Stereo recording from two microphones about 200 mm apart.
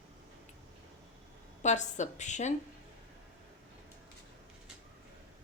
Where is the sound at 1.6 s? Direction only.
35° left (ahead or behind).